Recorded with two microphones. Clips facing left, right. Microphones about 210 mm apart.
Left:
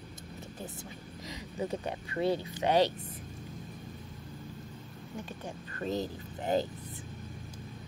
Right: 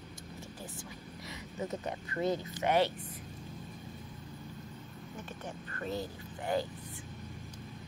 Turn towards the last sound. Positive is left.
turn(degrees=25)  # may be behind; listen again after turning